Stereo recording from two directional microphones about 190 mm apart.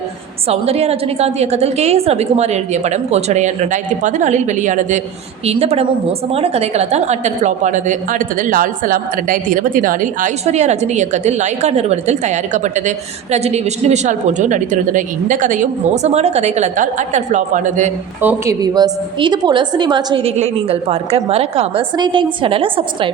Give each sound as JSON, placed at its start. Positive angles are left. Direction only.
{"t": 0.4, "sound": "a woman's voice", "side_deg": -35}
{"t": 18.2, "sound": "a woman's voice", "side_deg": -15}